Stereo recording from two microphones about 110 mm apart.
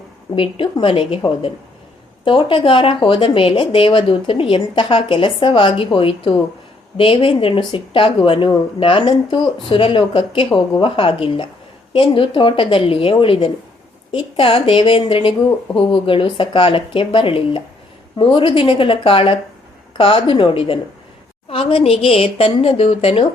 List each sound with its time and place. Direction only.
0.3 s a woman's voice: 50° left (ahead or behind)